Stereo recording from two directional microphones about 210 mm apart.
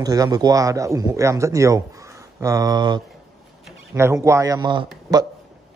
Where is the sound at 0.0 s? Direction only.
15° right (ahead or behind).